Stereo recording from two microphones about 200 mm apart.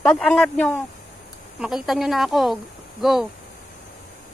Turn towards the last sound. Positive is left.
turn(degrees=0)  # may be behind; listen again after turning